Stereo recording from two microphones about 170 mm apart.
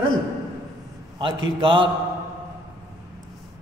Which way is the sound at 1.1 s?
30° right (ahead or behind).